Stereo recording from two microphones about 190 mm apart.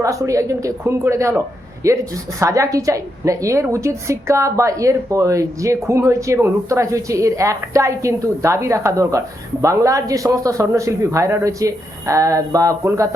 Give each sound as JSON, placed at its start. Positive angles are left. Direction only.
{"t": 0.0, "sound": "a woman's voice", "side_deg": -15}